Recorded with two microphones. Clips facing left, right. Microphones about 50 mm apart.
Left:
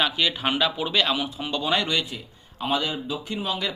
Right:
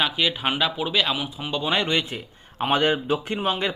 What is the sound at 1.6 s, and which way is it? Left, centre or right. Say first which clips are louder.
A man's voice: right 1 dB; right.